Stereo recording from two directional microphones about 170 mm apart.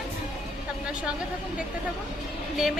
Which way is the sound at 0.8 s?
5° right (ahead or behind).